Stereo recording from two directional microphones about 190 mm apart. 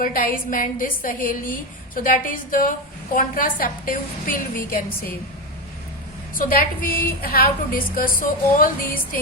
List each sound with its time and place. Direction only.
0.0 s a woman's voice: 50° left (ahead or behind)
6.3 s a woman's voice: 45° left (ahead or behind)